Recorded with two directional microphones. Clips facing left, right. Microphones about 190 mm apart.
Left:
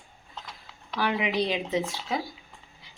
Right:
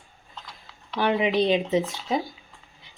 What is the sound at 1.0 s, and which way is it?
A woman's voice, 30° right (ahead or behind).